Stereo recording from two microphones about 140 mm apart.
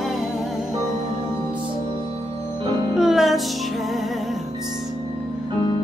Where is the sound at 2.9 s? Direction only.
5° right (ahead or behind).